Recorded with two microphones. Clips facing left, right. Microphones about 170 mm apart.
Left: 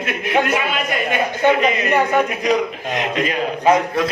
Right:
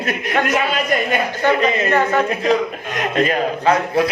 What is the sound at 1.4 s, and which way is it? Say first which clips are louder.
A man's voice: left 1 dB; 15° left (ahead or behind).